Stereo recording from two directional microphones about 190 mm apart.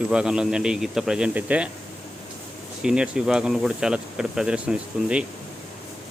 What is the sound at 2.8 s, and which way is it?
Speech, 5° right (ahead or behind).